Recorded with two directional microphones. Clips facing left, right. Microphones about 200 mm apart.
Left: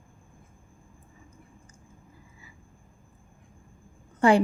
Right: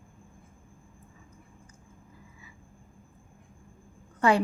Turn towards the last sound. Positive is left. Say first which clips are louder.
# left 4 dB
turn(degrees=30)  # may be behind; listen again after turning